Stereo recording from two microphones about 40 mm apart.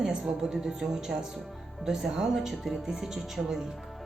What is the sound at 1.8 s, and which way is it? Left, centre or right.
A woman's voice, centre.